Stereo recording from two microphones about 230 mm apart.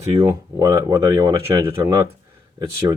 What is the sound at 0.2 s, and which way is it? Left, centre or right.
Speech, centre.